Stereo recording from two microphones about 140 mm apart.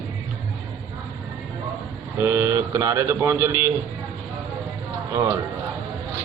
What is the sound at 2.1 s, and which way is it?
A man's voice, 20° right (ahead or behind).